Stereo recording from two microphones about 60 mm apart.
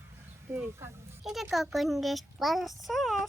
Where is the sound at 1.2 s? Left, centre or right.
Centre.